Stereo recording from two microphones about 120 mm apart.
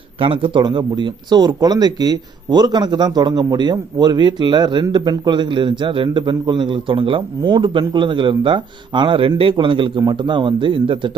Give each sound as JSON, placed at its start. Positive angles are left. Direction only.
{"t": 0.2, "sound": "a man's voice", "side_deg": -50}